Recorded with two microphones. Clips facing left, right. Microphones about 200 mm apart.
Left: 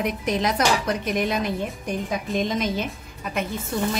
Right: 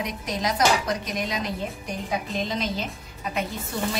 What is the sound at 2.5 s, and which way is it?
Speech, 50° left (ahead or behind).